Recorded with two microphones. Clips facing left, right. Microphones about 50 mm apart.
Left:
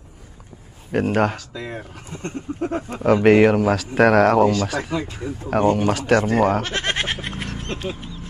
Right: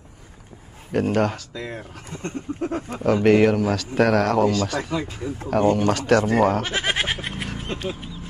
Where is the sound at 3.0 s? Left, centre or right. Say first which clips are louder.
Left 3 dB; left.